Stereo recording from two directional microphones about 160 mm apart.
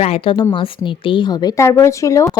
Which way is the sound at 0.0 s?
35° left (ahead or behind).